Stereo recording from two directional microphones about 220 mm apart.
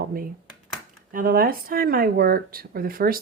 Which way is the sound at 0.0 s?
40° right (ahead or behind).